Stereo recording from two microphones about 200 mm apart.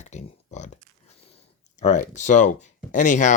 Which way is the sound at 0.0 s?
35° left (ahead or behind).